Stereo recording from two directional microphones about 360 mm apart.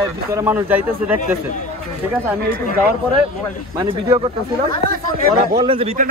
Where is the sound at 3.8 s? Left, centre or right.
Centre.